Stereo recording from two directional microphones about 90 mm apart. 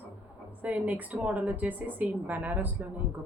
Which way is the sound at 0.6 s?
15° right (ahead or behind).